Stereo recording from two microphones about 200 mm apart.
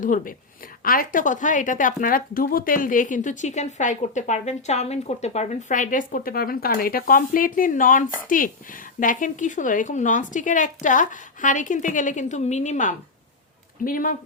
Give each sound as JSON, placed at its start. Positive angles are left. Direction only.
{"t": 0.0, "sound": "speech", "side_deg": 40}